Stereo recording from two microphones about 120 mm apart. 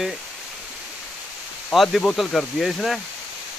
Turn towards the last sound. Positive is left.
turn(degrees=0)  # may be behind; listen again after turning